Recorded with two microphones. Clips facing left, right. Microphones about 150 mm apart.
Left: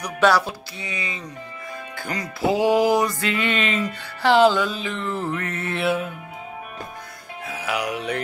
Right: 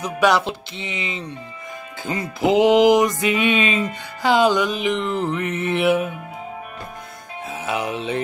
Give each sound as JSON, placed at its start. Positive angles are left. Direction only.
{"t": 0.2, "sound": "music", "side_deg": -20}
{"t": 7.4, "sound": "music", "side_deg": -25}